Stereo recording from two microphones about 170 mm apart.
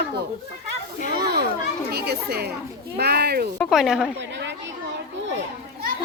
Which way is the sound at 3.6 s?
Centre (ahead or behind).